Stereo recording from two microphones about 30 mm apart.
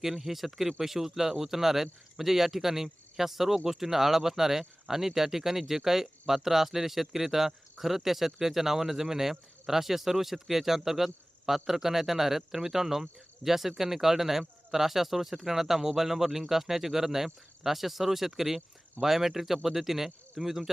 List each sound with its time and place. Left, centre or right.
0.0 s speech: centre